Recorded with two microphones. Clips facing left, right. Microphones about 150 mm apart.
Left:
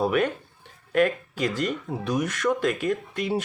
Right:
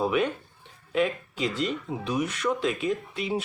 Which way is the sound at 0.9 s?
55° left (ahead or behind).